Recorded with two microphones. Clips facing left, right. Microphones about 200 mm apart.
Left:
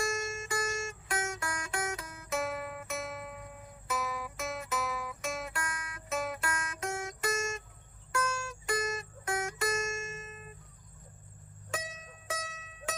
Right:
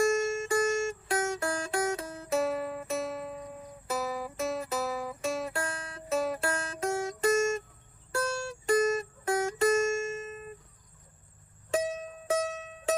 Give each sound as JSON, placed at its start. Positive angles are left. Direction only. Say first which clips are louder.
{"t": 0.0, "sound": "music", "louder": "right 9 dB", "side_deg": -35}
{"t": 11.7, "sound": "music", "louder": "right 11 dB", "side_deg": -30}